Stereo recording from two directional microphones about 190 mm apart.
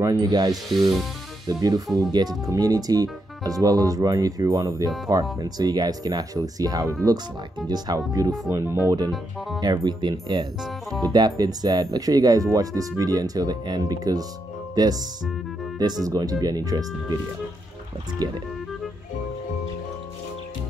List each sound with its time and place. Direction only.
0.0 s speech: 20° right (ahead or behind)
18.2 s speech: 20° right (ahead or behind)